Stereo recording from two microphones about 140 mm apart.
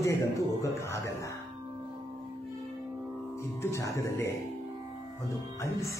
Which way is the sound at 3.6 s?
20° left (ahead or behind).